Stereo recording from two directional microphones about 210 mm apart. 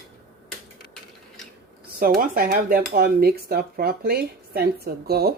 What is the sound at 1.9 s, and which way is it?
Speech, 40° right (ahead or behind).